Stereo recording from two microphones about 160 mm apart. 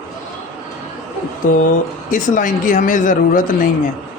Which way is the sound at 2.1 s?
55° left (ahead or behind).